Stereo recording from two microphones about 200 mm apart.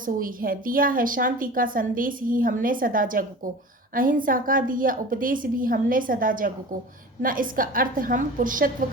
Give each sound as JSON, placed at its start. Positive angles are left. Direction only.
{"t": 0.0, "sound": "a woman's voice", "side_deg": -45}